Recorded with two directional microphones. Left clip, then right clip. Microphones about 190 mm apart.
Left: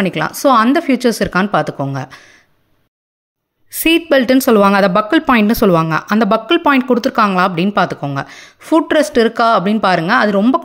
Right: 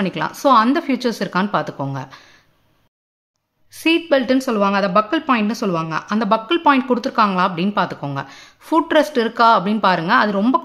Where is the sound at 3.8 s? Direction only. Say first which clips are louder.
Left 4 dB; 30° left (ahead or behind).